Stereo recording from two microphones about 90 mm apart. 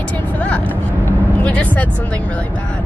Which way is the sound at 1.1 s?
15° left (ahead or behind).